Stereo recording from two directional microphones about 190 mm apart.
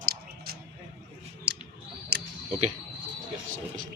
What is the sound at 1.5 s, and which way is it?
Scissors, 60° right (ahead or behind).